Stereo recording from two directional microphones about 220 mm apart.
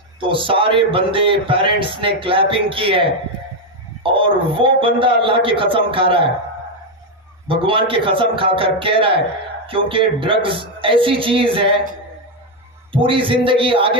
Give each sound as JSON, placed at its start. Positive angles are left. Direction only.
{"t": 0.2, "sound": "speech", "side_deg": -25}
{"t": 7.4, "sound": "speech", "side_deg": -25}
{"t": 12.9, "sound": "speech", "side_deg": -25}